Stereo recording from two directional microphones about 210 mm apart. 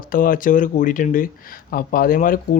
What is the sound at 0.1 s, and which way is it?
Speech, 40° left (ahead or behind).